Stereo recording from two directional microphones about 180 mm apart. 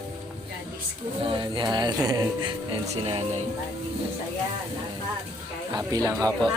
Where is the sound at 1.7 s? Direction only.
25° right (ahead or behind).